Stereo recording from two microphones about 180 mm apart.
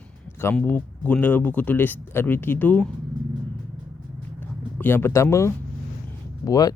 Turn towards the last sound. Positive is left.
turn(degrees=20)  # may be behind; listen again after turning